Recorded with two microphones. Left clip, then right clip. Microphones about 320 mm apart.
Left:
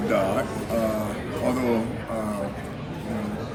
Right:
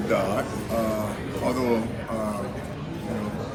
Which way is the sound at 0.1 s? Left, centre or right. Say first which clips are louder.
Left 1 dB; centre.